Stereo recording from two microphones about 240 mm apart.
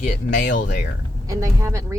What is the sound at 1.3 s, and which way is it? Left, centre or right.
Speech, centre.